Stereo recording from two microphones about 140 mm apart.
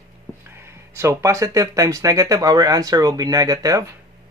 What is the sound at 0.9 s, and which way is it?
Speech, 20° right (ahead or behind).